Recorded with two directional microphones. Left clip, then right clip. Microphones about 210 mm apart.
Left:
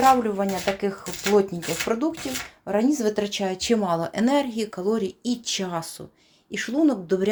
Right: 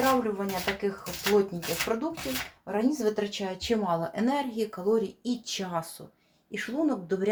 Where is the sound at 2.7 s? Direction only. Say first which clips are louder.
Left 5 dB; 55° left (ahead or behind).